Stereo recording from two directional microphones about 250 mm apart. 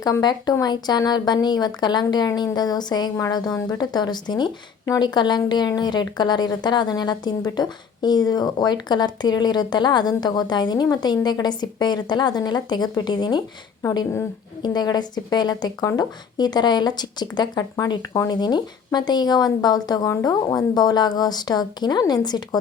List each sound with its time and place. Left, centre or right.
0.0 s a woman's voice: centre